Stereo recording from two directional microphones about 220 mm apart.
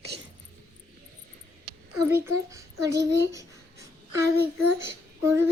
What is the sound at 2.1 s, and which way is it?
Child singing, 10° right (ahead or behind).